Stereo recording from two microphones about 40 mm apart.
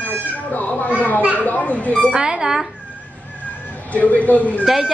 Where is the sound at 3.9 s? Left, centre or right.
Left.